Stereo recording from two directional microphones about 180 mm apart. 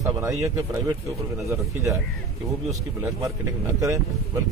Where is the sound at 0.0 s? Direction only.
15° right (ahead or behind).